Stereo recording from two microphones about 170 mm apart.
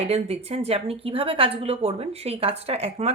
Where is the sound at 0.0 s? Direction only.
35° right (ahead or behind).